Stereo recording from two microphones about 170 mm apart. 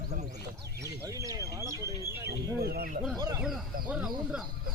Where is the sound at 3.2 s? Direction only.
25° right (ahead or behind).